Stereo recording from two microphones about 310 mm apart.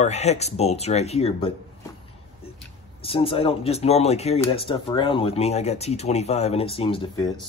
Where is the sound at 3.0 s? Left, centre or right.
Centre.